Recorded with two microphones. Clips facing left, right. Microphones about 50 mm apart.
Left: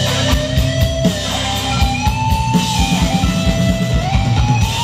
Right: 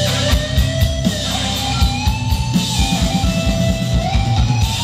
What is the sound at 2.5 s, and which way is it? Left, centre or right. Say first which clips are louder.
Music: left 3 dB; left.